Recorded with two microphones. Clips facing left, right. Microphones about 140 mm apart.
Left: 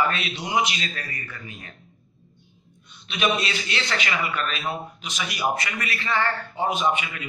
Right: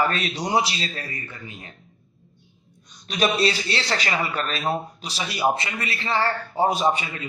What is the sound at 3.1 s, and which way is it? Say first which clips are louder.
A man's voice: right 3 dB; 35° right (ahead or behind).